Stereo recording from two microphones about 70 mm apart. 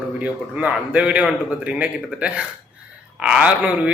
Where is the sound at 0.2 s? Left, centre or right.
Right.